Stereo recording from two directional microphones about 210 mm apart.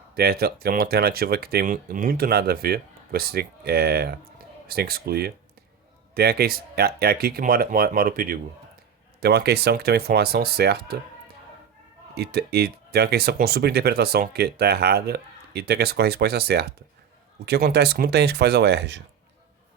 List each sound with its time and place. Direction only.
0.1 s speech: 45° right (ahead or behind)
12.1 s speech: 50° right (ahead or behind)